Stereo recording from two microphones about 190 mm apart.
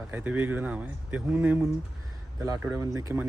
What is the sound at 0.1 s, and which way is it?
Speech, 10° right (ahead or behind).